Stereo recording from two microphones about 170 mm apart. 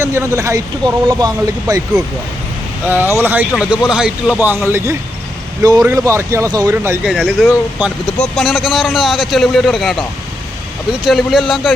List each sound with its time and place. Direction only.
0.0 s speech: 15° right (ahead or behind)
2.8 s speech: 10° right (ahead or behind)
7.0 s speech: 5° right (ahead or behind)
11.0 s speech: centre (ahead or behind)